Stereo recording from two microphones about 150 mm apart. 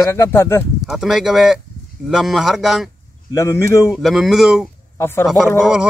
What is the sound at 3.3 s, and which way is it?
Speech, 20° left (ahead or behind).